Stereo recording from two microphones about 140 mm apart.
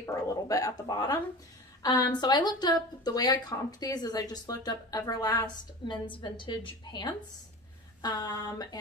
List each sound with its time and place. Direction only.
0.0 s speech: 20° left (ahead or behind)